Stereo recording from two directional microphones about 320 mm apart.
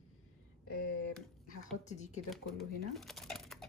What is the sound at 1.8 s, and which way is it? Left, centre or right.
Speech, left.